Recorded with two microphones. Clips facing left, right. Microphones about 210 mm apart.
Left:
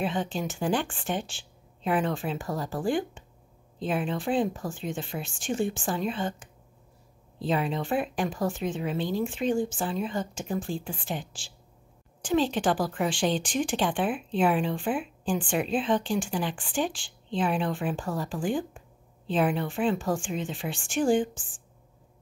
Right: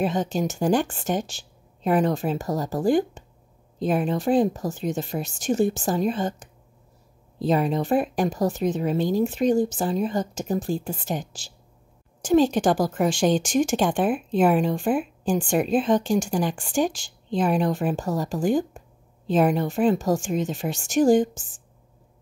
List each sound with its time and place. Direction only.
0.0 s a woman's voice: 40° right (ahead or behind)